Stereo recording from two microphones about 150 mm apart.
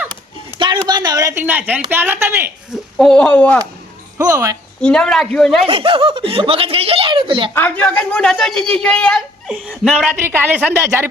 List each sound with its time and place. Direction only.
0.6 s a woman's voice: 30° right (ahead or behind); by 2.5 s 15° right (ahead or behind)
3.0 s speech: 5° left (ahead or behind)
4.2 s speech: 20° right (ahead or behind)
4.8 s a woman's voice: 5° left (ahead or behind)
5.6 s speech: 40° right (ahead or behind)
7.5 s a woman's voice: 10° left (ahead or behind)
10.1 s a woman's voice: 15° right (ahead or behind)